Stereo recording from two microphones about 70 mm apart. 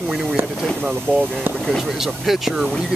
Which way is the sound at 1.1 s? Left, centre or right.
Right.